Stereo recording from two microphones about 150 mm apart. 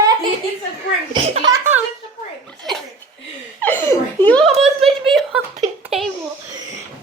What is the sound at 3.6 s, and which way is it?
Laughter, 15° left (ahead or behind).